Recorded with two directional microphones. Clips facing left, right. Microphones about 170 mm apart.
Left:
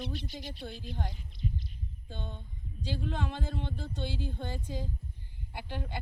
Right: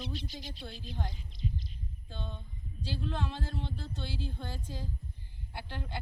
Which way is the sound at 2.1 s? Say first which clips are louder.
Left 1 dB; 15° left (ahead or behind).